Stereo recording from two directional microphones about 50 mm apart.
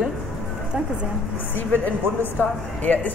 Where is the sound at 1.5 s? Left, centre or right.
Left.